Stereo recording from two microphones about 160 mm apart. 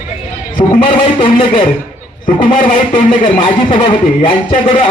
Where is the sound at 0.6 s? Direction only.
35° left (ahead or behind).